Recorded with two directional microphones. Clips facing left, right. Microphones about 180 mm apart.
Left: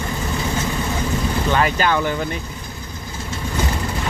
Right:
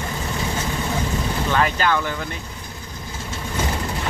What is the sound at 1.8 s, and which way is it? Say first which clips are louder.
Speech: left 2 dB; 15° left (ahead or behind).